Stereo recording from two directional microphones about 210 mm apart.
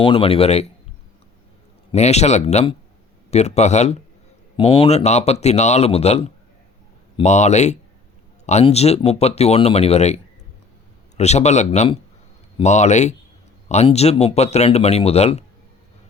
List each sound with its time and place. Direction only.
0.0 s speech: 25° left (ahead or behind)
1.9 s speech: 30° left (ahead or behind)
11.2 s speech: 30° left (ahead or behind)